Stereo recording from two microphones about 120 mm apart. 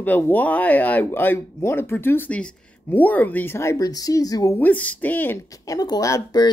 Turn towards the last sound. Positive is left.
turn(degrees=30)  # may be behind; listen again after turning